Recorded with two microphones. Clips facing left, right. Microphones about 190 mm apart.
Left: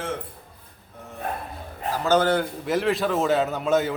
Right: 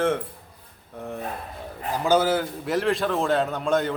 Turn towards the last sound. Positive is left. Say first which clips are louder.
# left 1 dB
turn(degrees=5)  # may be behind; listen again after turning